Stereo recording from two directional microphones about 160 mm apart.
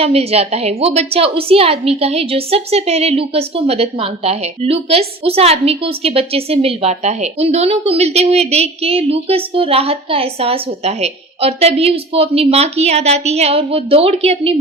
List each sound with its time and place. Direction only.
0.0 s a woman's voice: 40° right (ahead or behind)